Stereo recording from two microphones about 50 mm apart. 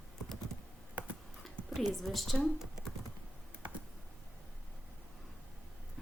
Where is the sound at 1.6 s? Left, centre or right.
Left.